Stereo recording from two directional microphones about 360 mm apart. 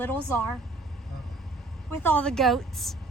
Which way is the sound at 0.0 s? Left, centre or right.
Centre.